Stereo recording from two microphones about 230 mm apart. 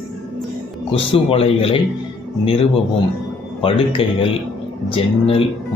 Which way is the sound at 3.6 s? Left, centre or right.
Left.